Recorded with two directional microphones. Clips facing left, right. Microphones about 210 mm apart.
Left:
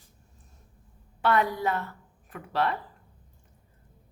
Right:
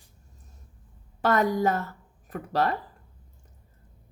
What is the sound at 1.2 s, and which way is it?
A woman's voice, 40° right (ahead or behind).